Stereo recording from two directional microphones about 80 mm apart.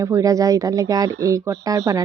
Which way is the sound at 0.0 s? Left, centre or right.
Right.